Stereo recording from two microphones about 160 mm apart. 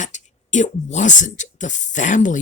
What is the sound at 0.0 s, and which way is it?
Speech, 50° left (ahead or behind).